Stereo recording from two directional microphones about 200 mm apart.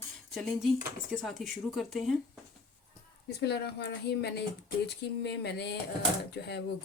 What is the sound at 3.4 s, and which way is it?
Speech, 55° left (ahead or behind).